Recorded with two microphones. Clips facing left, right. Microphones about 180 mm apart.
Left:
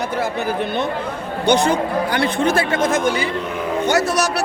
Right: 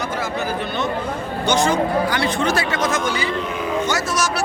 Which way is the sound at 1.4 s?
60° left (ahead or behind).